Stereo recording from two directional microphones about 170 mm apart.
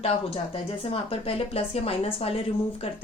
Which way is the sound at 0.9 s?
35° left (ahead or behind).